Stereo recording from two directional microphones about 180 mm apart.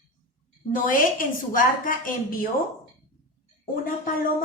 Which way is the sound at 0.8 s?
50° left (ahead or behind).